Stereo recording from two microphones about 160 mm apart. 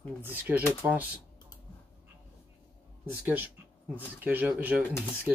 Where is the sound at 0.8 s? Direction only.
10° right (ahead or behind).